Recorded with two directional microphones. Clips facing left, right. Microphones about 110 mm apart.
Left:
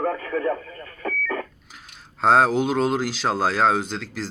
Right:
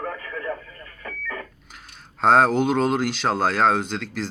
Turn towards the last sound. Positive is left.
turn(degrees=0)  # may be behind; listen again after turning